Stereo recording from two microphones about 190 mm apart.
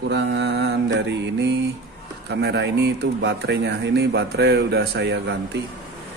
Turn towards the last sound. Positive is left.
turn(degrees=-65)  # may be behind; listen again after turning